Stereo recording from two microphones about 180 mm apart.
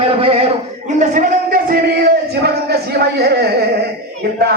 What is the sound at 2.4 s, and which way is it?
Speech, 60° right (ahead or behind).